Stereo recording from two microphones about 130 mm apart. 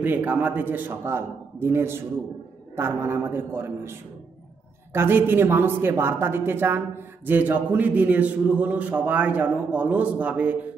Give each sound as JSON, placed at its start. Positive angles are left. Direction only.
{"t": 0.0, "sound": "speech", "side_deg": -15}
{"t": 4.9, "sound": "speech", "side_deg": -15}